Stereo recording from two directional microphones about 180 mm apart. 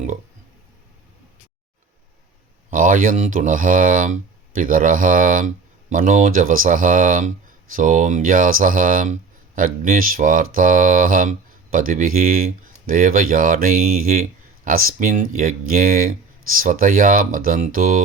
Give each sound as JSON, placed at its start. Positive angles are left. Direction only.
{"t": 2.6, "sound": "speech", "side_deg": -50}